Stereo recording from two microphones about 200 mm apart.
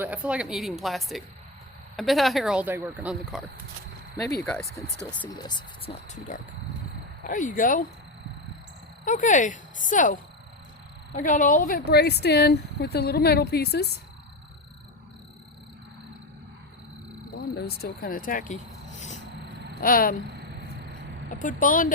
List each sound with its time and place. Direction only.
0.0 s speech: 5° right (ahead or behind)
4.4 s speech: 5° left (ahead or behind)
5.4 s speech: 20° left (ahead or behind); by 7.9 s 45° left (ahead or behind)
9.0 s speech: 40° left (ahead or behind); by 14.0 s 55° left (ahead or behind)
17.3 s speech: 50° left (ahead or behind)
21.2 s speech: 40° left (ahead or behind)